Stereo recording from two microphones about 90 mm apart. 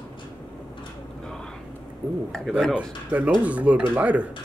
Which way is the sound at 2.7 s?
15° right (ahead or behind).